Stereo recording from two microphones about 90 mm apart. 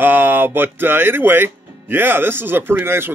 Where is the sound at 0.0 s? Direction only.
25° right (ahead or behind).